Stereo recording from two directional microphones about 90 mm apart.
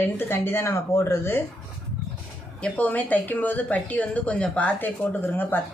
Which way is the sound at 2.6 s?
15° left (ahead or behind).